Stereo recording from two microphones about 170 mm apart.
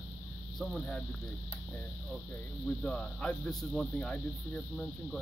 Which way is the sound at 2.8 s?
5° left (ahead or behind).